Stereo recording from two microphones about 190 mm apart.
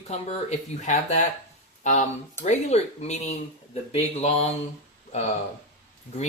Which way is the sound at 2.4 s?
35° left (ahead or behind).